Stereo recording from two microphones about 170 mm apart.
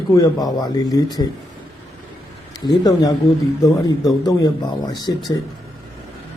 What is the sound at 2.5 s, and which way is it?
Speech, 20° left (ahead or behind).